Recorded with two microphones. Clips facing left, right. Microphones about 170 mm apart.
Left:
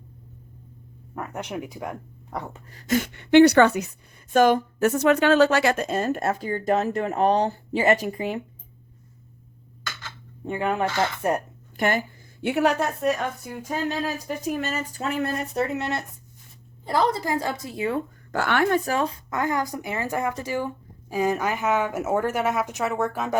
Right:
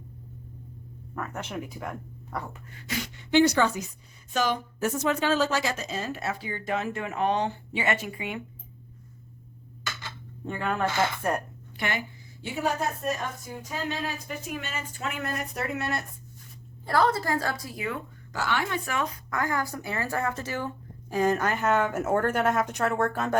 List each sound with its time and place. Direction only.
1.1 s speech: 15° left (ahead or behind)
2.6 s a woman's voice: 40° left (ahead or behind)
10.4 s speech: 15° left (ahead or behind)
11.8 s a sound: 45° left (ahead or behind)
12.5 s a woman's voice: 70° left (ahead or behind); by 18.0 s 30° left (ahead or behind)
18.3 s a woman's voice: 60° left (ahead or behind)
18.9 s speech: 30° left (ahead or behind); by 23.4 s 10° left (ahead or behind)